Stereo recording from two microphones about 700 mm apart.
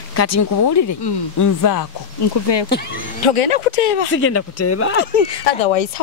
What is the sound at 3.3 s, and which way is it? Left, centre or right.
Speech, left.